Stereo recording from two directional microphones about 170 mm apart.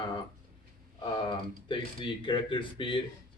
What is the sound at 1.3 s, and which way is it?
Speech, 30° left (ahead or behind).